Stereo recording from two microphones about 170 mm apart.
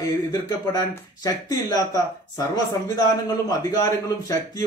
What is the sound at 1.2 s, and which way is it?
Speech, 20° left (ahead or behind).